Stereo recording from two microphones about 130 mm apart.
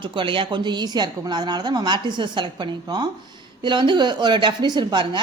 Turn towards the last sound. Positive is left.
turn(degrees=-35)  # may be behind; listen again after turning